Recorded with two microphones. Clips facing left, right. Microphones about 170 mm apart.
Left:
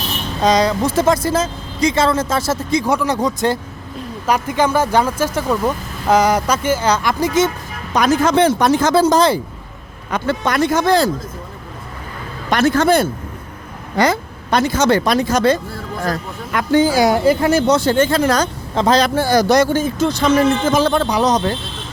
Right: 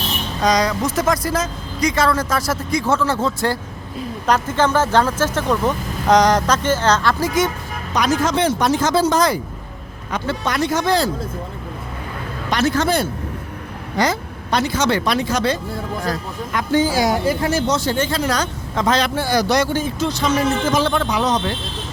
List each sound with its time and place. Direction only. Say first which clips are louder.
0.4 s speech: left 3 dB; 25° left (ahead or behind)
7.9 s speech: left 4 dB; 55° left (ahead or behind)
9.0 s speech: left 4 dB; 30° left (ahead or behind)
10.1 s speech: left 4 dB; 55° left (ahead or behind)
12.5 s speech: left 4 dB; 55° left (ahead or behind)
16.0 s speech: left 2 dB; 55° left (ahead or behind)
18.7 s speech: left 4 dB; 35° left (ahead or behind); by 20.8 s 55° left (ahead or behind)
20.8 s speech: left 3 dB; 40° left (ahead or behind)